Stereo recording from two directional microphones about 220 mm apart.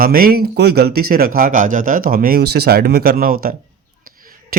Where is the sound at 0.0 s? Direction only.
40° right (ahead or behind).